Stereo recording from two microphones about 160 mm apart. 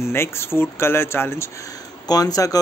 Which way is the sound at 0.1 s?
15° left (ahead or behind).